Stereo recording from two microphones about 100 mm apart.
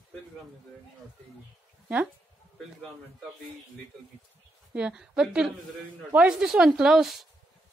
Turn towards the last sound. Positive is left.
turn(degrees=0)  # may be behind; listen again after turning